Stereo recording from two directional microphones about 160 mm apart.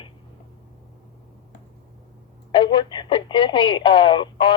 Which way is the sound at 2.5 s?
30° left (ahead or behind).